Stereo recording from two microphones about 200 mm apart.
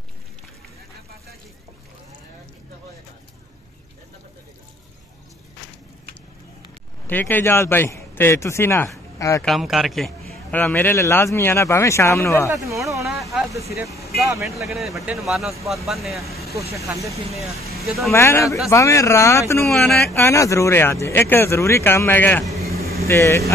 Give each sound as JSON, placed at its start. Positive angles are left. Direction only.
{"t": 7.1, "sound": "a man's voice", "side_deg": 10}
{"t": 9.4, "sound": "a man's voice", "side_deg": 0}
{"t": 12.4, "sound": "a sound", "side_deg": -15}
{"t": 13.0, "sound": "a sound", "side_deg": 0}
{"t": 13.7, "sound": "speech", "side_deg": -15}
{"t": 14.4, "sound": "a man's voice", "side_deg": 0}
{"t": 16.5, "sound": "speech", "side_deg": -15}
{"t": 17.7, "sound": "speech", "side_deg": 0}
{"t": 18.1, "sound": "speech", "side_deg": 15}
{"t": 19.8, "sound": "a man's voice", "side_deg": 0}
{"t": 20.2, "sound": "speech", "side_deg": 15}
{"t": 22.8, "sound": "vehicle", "side_deg": -50}
{"t": 23.0, "sound": "speech", "side_deg": 15}